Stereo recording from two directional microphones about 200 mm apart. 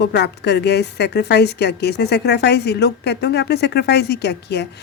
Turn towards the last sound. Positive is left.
turn(degrees=55)  # may be behind; listen again after turning